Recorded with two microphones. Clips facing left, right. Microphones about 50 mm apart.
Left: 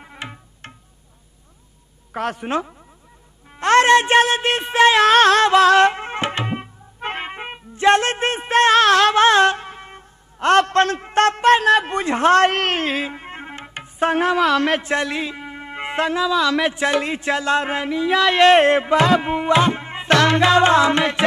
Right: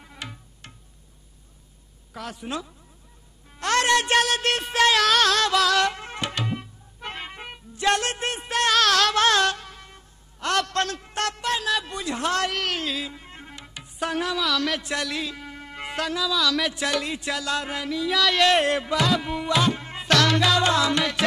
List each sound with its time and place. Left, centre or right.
0.0 s music: left
2.1 s a man's voice: left